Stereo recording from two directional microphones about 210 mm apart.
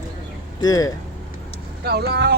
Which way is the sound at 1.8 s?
50° right (ahead or behind).